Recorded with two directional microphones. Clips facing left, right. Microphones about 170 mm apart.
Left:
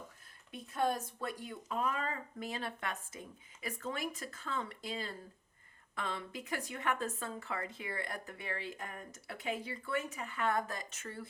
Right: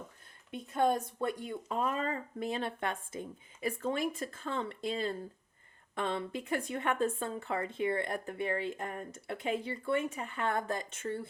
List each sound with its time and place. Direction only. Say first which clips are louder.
0.5 s speech: right 5 dB; 25° right (ahead or behind)